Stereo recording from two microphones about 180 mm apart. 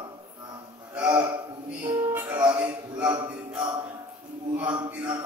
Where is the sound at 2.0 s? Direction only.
10° right (ahead or behind).